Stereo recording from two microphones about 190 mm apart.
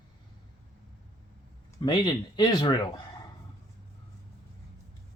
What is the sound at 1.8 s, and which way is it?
Speech, 25° left (ahead or behind).